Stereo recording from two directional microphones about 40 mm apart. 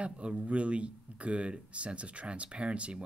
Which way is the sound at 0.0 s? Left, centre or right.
Right.